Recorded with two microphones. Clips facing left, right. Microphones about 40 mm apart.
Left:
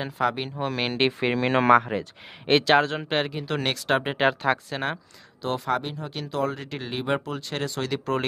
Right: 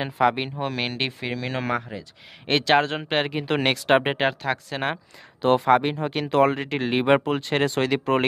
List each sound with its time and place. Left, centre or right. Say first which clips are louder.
0.0 s speech: right 4 dB; centre
0.7 s speech: left 2 dB; centre
1.2 s speech: left 7 dB; left
2.4 s speech: left 1 dB; centre
2.8 s speech: right 1 dB; centre
4.4 s speech: left 3 dB; centre
5.4 s speech: right 8 dB; right
7.9 s speech: right 5 dB; right